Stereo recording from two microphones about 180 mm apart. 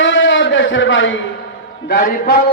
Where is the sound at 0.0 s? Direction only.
90° left.